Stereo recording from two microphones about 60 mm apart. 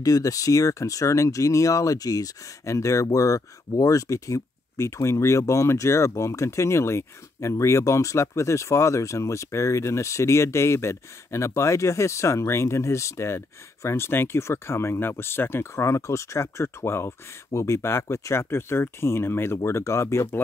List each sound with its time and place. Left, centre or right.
0.0 s speech: left
17.5 s speech: left